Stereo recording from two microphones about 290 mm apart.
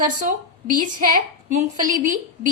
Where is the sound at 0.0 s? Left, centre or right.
Right.